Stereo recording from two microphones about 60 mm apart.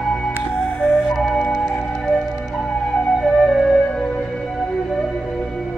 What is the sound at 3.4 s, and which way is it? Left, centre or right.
Music, centre.